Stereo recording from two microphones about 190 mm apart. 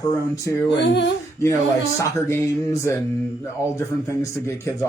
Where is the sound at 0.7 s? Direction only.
70° left (ahead or behind).